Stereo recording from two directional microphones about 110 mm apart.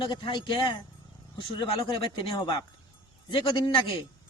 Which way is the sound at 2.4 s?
40° left (ahead or behind).